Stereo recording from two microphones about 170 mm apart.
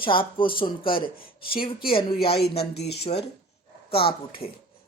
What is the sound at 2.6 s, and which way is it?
Speech, 75° left (ahead or behind).